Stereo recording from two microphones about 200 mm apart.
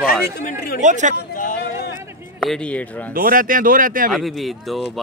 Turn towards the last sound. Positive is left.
turn(degrees=0)  # may be behind; listen again after turning